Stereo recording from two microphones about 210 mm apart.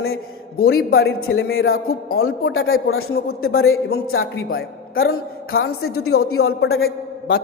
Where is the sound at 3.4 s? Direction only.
75° left (ahead or behind).